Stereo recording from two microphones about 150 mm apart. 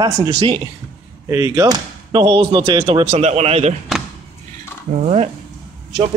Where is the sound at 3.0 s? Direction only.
45° right (ahead or behind).